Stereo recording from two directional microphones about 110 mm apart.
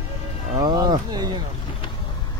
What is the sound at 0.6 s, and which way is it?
Speech, 40° right (ahead or behind).